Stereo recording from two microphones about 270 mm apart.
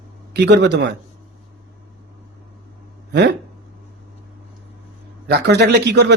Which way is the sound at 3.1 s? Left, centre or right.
Right.